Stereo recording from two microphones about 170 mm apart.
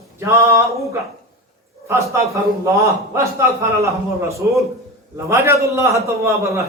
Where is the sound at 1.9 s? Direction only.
15° right (ahead or behind).